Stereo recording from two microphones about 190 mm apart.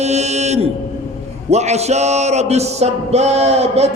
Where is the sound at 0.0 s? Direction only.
35° right (ahead or behind).